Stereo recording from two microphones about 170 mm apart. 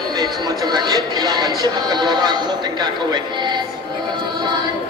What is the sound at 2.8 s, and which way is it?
Speech, 25° right (ahead or behind).